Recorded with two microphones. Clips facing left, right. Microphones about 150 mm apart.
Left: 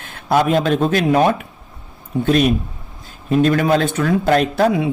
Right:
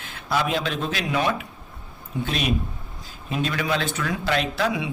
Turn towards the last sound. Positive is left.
turn(degrees=50)  # may be behind; listen again after turning